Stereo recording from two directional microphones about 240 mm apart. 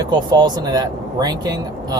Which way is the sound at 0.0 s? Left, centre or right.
Centre.